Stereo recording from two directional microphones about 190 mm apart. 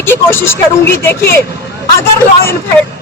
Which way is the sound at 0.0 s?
10° left (ahead or behind).